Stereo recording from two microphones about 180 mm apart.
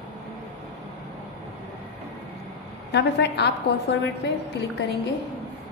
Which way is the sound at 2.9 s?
70° left (ahead or behind).